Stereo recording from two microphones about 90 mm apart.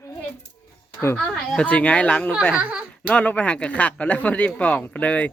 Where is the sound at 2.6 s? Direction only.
15° right (ahead or behind).